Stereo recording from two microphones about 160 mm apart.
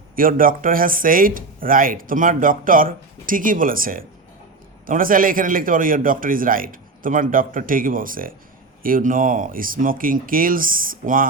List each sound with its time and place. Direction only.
0.2 s speech: 60° right (ahead or behind)